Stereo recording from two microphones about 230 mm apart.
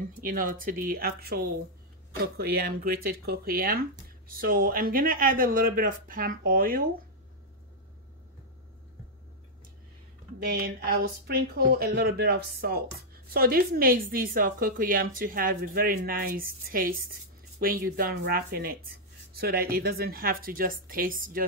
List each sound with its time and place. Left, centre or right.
0.2 s speech: right
10.4 s speech: right